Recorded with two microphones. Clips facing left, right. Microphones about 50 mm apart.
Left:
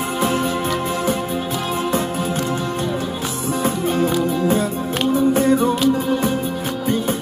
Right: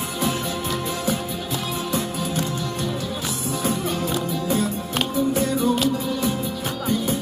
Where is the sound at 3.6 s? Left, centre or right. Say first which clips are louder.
Left 6 dB; left.